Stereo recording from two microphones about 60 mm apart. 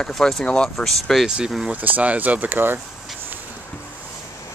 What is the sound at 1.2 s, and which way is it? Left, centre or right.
Speech, centre.